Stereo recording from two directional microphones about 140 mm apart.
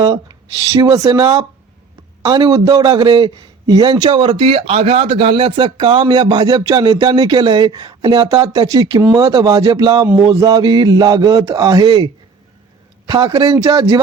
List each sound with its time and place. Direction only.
0.0 s a man's voice: 30° right (ahead or behind)